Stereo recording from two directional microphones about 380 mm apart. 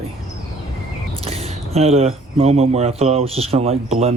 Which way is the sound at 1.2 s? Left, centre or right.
Centre.